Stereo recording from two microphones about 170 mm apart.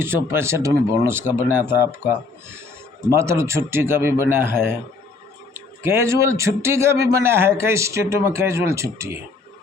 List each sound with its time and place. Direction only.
0.0 s a man's voice: 15° right (ahead or behind)